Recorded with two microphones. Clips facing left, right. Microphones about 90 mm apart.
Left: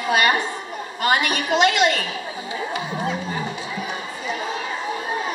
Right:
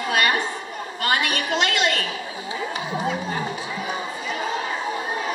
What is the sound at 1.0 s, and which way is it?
A woman's voice, 15° left (ahead or behind).